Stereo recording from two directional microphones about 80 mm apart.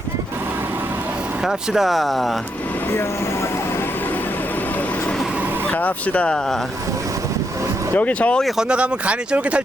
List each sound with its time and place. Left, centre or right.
1.4 s speech: centre
5.7 s speech: centre
7.9 s speech: centre
8.4 s speech: centre